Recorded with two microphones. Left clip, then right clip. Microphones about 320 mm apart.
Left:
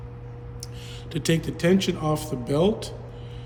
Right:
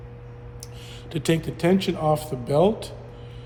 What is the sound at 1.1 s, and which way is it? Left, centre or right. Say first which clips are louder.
Speech: right 1 dB; centre.